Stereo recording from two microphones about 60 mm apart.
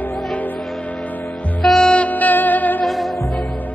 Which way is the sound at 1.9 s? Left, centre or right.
Left.